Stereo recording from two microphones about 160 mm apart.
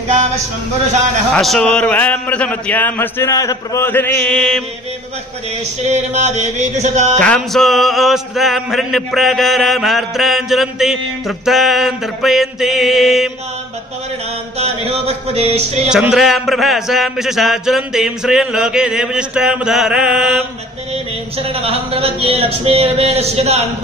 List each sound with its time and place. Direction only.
1.3 s a man's voice: 5° left (ahead or behind)
5.9 s chant: 45° right (ahead or behind)
7.2 s music: 5° left (ahead or behind)
14.6 s speech: 40° right (ahead or behind)
15.9 s music: 5° right (ahead or behind)
20.9 s speech: 35° right (ahead or behind)